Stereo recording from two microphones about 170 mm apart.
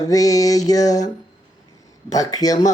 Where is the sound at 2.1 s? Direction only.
20° left (ahead or behind).